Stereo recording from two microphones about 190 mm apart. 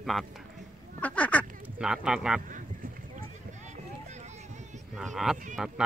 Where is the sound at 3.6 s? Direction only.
35° right (ahead or behind).